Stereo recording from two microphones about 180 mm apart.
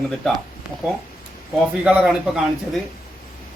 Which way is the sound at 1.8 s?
5° right (ahead or behind).